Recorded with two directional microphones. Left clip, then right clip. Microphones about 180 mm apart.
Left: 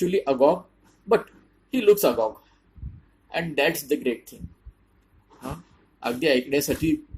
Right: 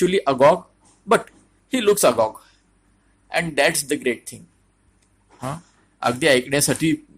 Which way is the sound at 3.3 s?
40° right (ahead or behind).